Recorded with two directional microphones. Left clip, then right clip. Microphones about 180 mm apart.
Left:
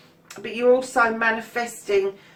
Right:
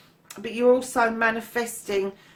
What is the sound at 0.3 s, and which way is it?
Speech, 45° right (ahead or behind).